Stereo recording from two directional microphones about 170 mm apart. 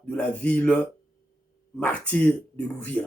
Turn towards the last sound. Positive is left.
turn(degrees=10)  # may be behind; listen again after turning